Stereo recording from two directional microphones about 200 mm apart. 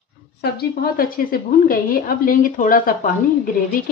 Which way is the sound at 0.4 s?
50° left (ahead or behind).